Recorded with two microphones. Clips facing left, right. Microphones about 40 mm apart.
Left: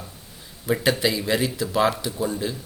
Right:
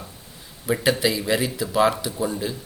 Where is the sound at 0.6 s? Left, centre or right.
Centre.